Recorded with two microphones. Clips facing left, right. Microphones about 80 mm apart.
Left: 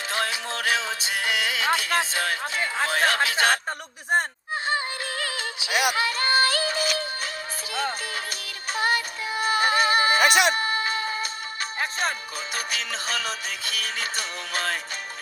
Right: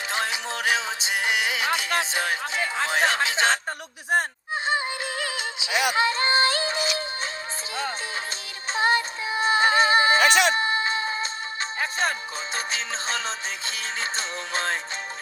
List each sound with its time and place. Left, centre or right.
0.1 s music: right
3.7 s speech: centre
4.6 s music: centre
6.7 s music: left
8.7 s music: right
10.2 s speech: centre
10.5 s chicken: right
12.5 s music: right